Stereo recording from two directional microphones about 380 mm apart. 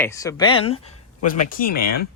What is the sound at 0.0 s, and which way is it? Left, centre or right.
Speech, centre.